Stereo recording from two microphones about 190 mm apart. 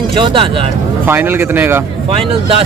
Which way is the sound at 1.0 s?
10° right (ahead or behind).